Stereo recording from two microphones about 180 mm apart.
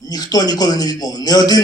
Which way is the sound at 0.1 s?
20° left (ahead or behind).